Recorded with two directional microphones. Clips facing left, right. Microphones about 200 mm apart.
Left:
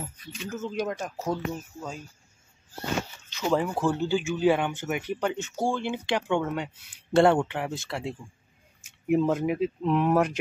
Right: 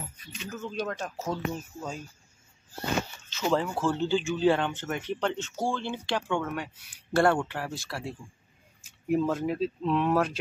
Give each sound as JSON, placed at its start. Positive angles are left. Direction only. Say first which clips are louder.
{"t": 0.6, "sound": "speech", "louder": "left 3 dB", "side_deg": 15}
{"t": 1.3, "sound": "speech", "louder": "left 1 dB", "side_deg": 5}
{"t": 3.3, "sound": "speech", "louder": "left 2 dB", "side_deg": 15}